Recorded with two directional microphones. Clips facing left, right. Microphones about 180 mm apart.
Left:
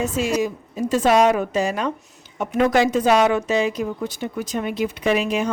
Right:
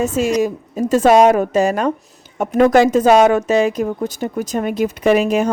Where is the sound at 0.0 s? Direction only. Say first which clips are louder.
Right 5 dB; 45° right (ahead or behind).